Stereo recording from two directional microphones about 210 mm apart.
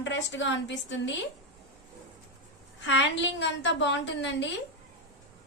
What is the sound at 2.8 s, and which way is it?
A woman's voice, 60° left (ahead or behind).